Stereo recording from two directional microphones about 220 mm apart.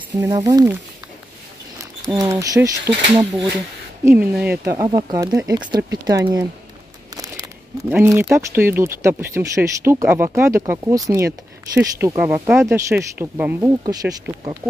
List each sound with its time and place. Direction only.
0.2 s speech: 15° right (ahead or behind)
2.0 s speech: 15° right (ahead or behind)
7.9 s speech: 10° right (ahead or behind)